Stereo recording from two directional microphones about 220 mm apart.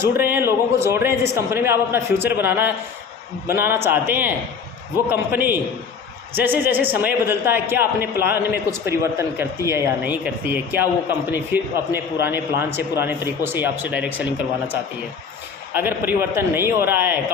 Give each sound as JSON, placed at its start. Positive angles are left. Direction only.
{"t": 0.0, "sound": "a man's voice", "side_deg": -10}
{"t": 15.7, "sound": "a man's voice", "side_deg": -10}